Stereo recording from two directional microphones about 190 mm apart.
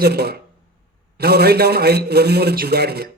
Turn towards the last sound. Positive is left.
turn(degrees=-55)  # may be behind; listen again after turning